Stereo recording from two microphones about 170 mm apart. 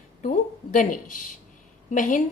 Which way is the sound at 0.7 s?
50° left (ahead or behind).